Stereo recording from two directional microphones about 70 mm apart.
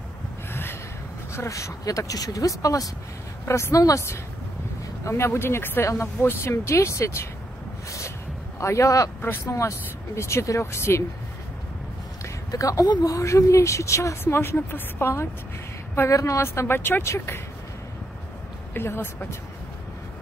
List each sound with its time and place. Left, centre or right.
0.5 s a sound: left
1.3 s speech: left
3.4 s speech: left
5.0 s speech: left
8.5 s speech: left
12.4 s speech: left
18.7 s speech: left